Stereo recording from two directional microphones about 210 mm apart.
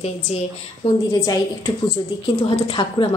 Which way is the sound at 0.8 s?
25° left (ahead or behind).